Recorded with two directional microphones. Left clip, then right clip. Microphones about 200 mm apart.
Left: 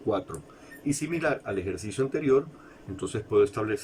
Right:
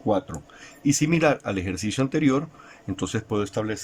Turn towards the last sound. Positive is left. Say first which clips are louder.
# left 3 dB
turn(degrees=-40)  # may be behind; listen again after turning